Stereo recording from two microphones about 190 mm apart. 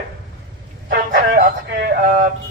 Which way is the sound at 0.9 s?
45° right (ahead or behind).